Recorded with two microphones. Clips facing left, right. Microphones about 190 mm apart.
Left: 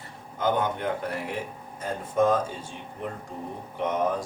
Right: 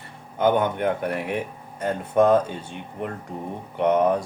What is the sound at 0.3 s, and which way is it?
Speech, 60° right (ahead or behind).